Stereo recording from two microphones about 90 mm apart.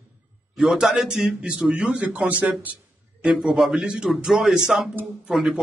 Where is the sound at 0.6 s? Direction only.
5° right (ahead or behind).